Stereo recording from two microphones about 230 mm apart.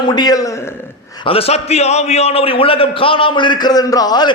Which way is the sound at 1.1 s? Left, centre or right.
Left.